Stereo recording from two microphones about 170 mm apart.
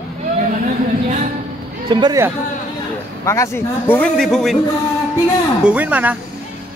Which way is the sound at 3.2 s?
15° left (ahead or behind).